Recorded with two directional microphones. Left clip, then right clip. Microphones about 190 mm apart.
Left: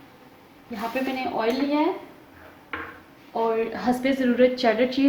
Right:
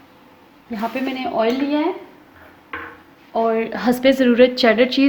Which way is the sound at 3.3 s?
50° right (ahead or behind).